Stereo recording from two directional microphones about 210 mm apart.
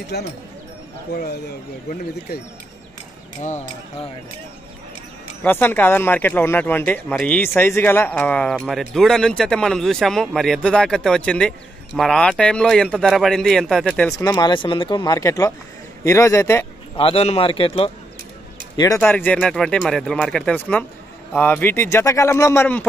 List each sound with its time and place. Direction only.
0.1 s speech: 50° left (ahead or behind)
5.4 s speech: 10° left (ahead or behind)
14.1 s a man's voice: 15° left (ahead or behind)
16.9 s speech: 25° left (ahead or behind)
18.8 s a man's voice: 15° left (ahead or behind)